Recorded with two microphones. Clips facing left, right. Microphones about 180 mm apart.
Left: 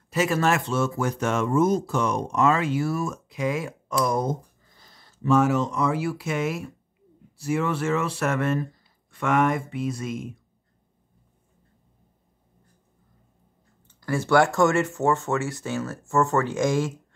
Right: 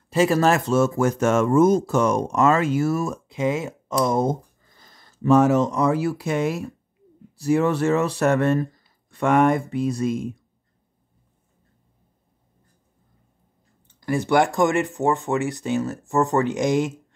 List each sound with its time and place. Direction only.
0.1 s speech: 30° right (ahead or behind)
3.3 s speech: 25° right (ahead or behind)
4.7 s speech: 50° right (ahead or behind)
13.9 s speech: 15° right (ahead or behind)